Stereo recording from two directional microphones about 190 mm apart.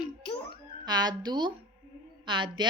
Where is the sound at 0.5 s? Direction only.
20° right (ahead or behind).